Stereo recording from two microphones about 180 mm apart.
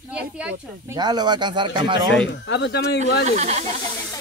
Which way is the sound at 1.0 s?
25° right (ahead or behind).